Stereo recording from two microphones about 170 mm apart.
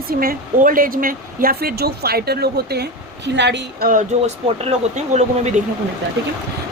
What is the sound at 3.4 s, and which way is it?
Speech, 85° right.